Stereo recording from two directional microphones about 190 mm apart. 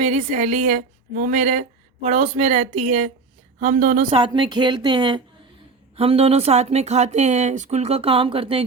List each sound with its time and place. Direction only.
0.0 s a woman's voice: 35° right (ahead or behind)